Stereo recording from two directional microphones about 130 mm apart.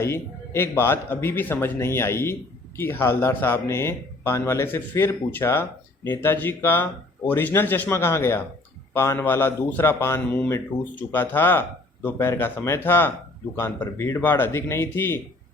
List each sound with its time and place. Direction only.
0.0 s a man's voice: 20° left (ahead or behind)